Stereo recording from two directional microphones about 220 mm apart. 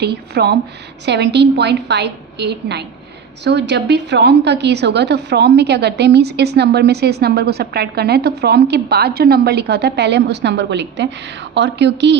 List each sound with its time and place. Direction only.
0.0 s a woman's voice: 50° right (ahead or behind)